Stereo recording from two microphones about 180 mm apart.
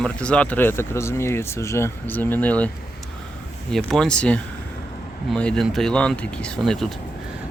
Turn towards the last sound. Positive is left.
turn(degrees=0)  # may be behind; listen again after turning